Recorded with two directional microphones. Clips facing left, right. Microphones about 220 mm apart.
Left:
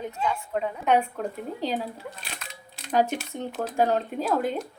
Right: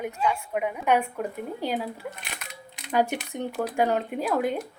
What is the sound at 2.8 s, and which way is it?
A woman's voice, 15° right (ahead or behind).